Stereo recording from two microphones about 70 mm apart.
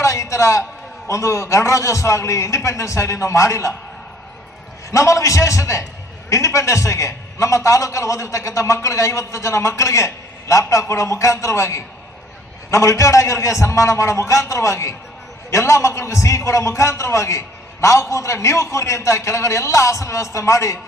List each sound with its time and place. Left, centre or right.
0.0 s a sound: left
1.0 s a man's voice: left
4.9 s a man's voice: left